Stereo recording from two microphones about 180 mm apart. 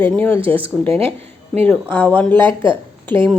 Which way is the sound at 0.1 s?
10° left (ahead or behind).